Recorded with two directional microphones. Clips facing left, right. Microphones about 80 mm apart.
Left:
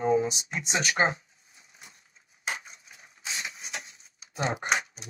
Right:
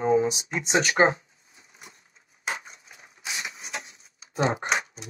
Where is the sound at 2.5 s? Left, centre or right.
Right.